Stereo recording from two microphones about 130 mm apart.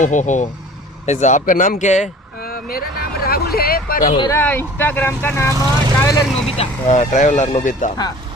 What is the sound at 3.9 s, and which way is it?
Speech, 90° left.